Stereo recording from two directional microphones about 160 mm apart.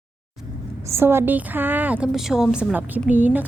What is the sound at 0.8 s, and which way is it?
A woman's voice, 15° right (ahead or behind).